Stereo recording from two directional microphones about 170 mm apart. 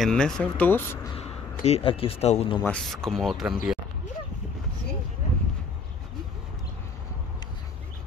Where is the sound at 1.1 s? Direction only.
40° left (ahead or behind).